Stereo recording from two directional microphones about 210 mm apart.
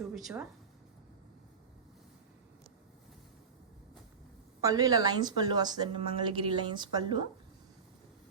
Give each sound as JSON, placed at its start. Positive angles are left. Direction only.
{"t": 0.1, "sound": "speech", "side_deg": 0}
{"t": 4.6, "sound": "a woman's voice", "side_deg": -15}